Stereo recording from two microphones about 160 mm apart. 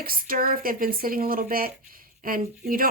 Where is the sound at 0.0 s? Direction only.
65° right (ahead or behind).